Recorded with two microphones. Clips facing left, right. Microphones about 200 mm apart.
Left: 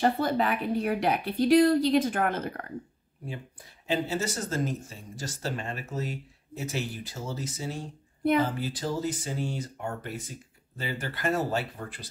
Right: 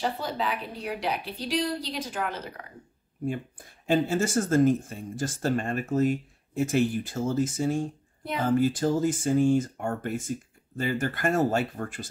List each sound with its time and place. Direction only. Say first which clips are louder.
0.0 s speech: left 5 dB; 55° left (ahead or behind)
3.8 s speech: right 5 dB; 50° right (ahead or behind)